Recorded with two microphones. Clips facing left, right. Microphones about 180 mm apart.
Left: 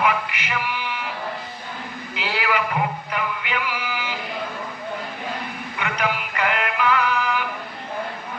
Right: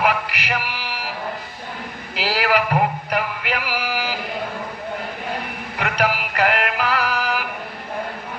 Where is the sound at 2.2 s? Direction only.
65° right (ahead or behind).